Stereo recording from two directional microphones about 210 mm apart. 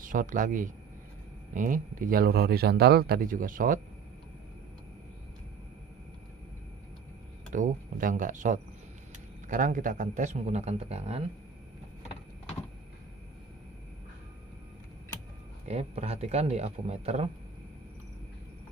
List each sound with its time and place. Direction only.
0.1 s a man's voice: 40° right (ahead or behind)
7.5 s a man's voice: 35° right (ahead or behind)
15.7 s a man's voice: 30° right (ahead or behind)